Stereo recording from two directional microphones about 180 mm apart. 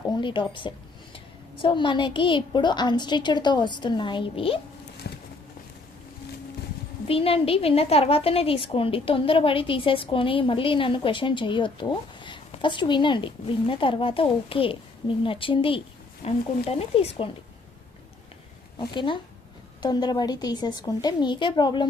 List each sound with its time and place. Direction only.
0.2 s a woman's voice: 25° left (ahead or behind)
5.0 s a sound: 70° left (ahead or behind)
7.1 s a woman's voice: 30° left (ahead or behind)
18.8 s a woman's voice: 25° left (ahead or behind)